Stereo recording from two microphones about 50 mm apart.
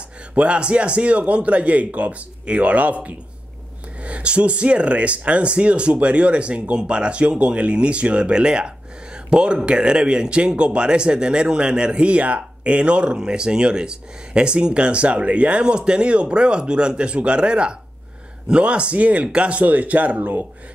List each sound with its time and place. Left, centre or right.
0.3 s speech: right